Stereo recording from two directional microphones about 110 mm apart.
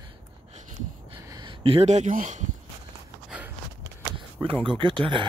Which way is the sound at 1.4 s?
50° right (ahead or behind).